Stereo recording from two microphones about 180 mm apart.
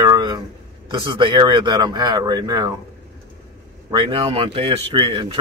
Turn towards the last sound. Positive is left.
turn(degrees=-30)  # may be behind; listen again after turning